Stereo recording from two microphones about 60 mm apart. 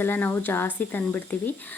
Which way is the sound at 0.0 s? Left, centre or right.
Left.